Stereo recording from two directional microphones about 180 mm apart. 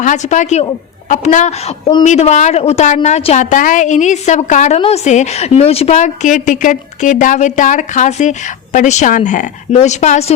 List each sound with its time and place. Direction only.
0.0 s a woman's voice: 45° left (ahead or behind)